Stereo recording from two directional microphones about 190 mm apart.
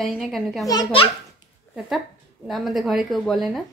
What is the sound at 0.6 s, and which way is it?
Speech, 25° left (ahead or behind).